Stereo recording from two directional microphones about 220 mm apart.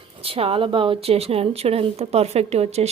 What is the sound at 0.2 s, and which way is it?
A woman's voice, 25° right (ahead or behind).